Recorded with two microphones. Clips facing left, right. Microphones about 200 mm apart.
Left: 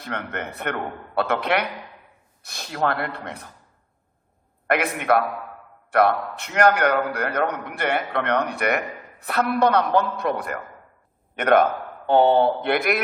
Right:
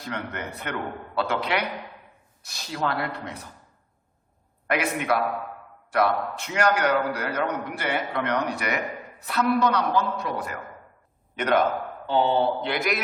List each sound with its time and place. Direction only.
0.0 s a man's voice: 55° left (ahead or behind)
4.6 s a man's voice: 55° left (ahead or behind)